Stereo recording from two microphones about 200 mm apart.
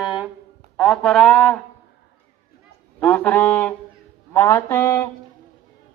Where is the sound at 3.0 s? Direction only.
10° left (ahead or behind).